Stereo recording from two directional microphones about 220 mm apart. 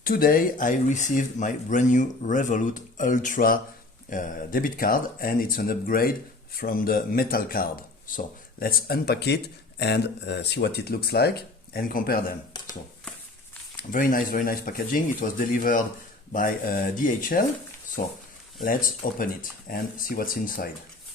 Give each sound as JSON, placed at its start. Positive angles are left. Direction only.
{"t": 0.0, "sound": "speech", "side_deg": 40}
{"t": 13.7, "sound": "speech", "side_deg": 40}
{"t": 19.2, "sound": "speech", "side_deg": 40}